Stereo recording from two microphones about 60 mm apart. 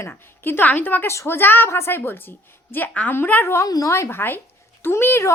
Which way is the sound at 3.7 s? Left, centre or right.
Left.